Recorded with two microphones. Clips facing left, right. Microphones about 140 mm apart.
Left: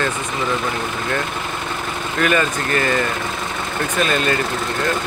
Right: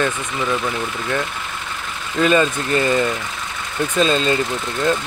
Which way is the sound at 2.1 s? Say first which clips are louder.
Right 3 dB; 20° right (ahead or behind).